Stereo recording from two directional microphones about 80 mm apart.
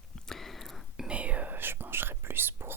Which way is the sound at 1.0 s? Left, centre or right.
Centre.